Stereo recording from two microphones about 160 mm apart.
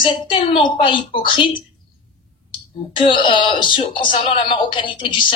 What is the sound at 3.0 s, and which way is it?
Speech, 30° left (ahead or behind).